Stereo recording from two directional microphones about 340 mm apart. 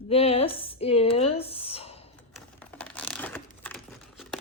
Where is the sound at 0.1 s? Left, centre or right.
Centre.